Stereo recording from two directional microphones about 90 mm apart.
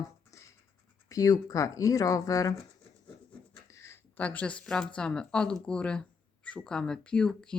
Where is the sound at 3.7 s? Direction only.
35° left (ahead or behind).